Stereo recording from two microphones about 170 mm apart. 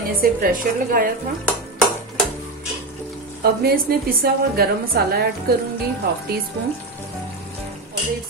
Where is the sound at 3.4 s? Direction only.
65° right (ahead or behind).